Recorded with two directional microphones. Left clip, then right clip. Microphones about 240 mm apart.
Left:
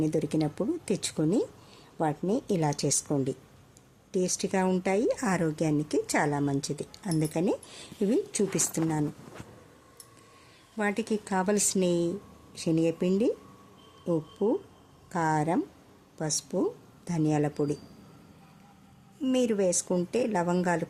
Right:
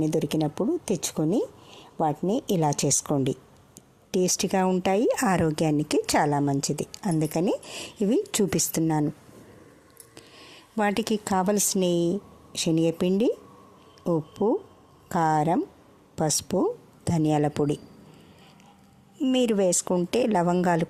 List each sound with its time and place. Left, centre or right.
0.0 s speech: right
10.8 s speech: right
19.2 s speech: right